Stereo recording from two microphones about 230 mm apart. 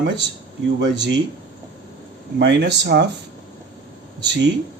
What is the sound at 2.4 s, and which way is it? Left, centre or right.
Speech, right.